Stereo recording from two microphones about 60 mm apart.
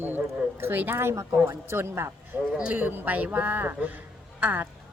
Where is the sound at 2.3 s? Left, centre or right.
Right.